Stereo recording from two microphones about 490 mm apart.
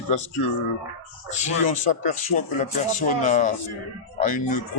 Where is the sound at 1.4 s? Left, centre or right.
Centre.